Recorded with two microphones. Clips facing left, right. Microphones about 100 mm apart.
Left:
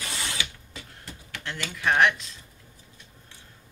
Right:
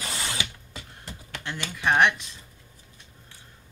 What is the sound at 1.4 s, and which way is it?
Speech, 15° right (ahead or behind).